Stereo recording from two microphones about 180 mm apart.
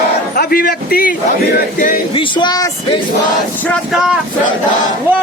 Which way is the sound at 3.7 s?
Centre (ahead or behind).